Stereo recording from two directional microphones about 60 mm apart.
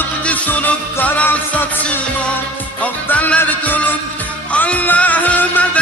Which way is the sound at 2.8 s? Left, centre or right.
Left.